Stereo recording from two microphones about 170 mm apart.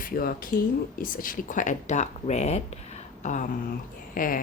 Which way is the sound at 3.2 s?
45° left (ahead or behind).